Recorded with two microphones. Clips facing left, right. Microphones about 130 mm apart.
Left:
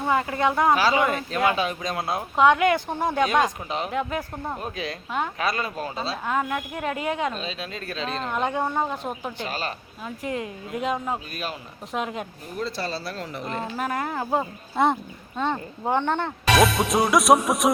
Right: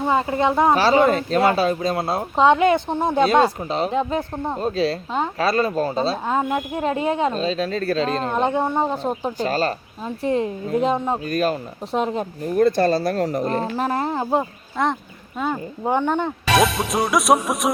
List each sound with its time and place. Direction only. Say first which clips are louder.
0.0 s speech: right 3 dB; 25° right (ahead or behind)
0.8 s speech: right 6 dB; 35° right (ahead or behind); by 3.2 s 20° right (ahead or behind)
3.2 s speech: right 6 dB; 35° right (ahead or behind)
8.4 s speech: right 4 dB; 25° right (ahead or behind)
8.9 s speech: right 7 dB; 30° right (ahead or behind)
11.3 s speech: right 12 dB; 45° right (ahead or behind)
11.9 s speech: right 7 dB; 35° right (ahead or behind)
12.5 s speech: right 13 dB; 50° right (ahead or behind); by 14.4 s 20° right (ahead or behind)
14.8 s music: left 1 dB; 5° left (ahead or behind)
15.4 s speech: right 2 dB; 5° right (ahead or behind)
16.5 s music: even; centre (ahead or behind)